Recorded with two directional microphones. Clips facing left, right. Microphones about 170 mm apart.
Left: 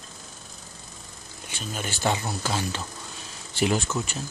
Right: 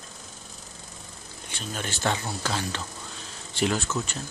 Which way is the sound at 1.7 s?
10° left (ahead or behind).